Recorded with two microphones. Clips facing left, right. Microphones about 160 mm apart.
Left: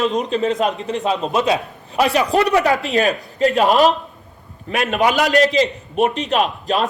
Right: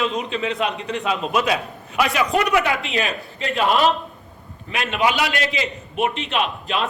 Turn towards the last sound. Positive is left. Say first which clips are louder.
# left 5 dB
turn(degrees=40)  # may be behind; listen again after turning